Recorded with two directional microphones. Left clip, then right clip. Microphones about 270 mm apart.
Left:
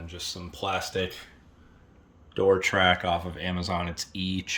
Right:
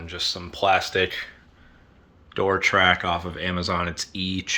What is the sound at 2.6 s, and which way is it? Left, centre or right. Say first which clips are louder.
Speech: right 4 dB; centre.